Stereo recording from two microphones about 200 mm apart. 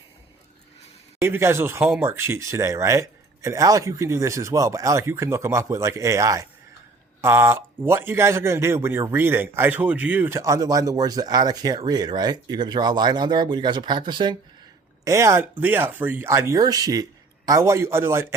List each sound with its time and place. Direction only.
1.2 s speech: 15° right (ahead or behind)